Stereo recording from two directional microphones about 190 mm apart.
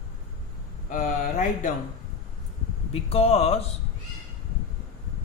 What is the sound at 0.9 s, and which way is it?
Speech, 45° left (ahead or behind).